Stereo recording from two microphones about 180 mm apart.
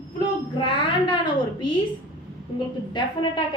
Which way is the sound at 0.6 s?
25° left (ahead or behind).